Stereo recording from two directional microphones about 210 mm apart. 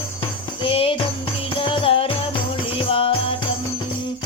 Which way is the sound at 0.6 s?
25° left (ahead or behind).